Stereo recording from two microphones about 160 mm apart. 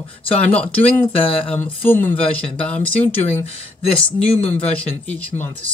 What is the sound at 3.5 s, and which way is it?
Speech, 40° left (ahead or behind).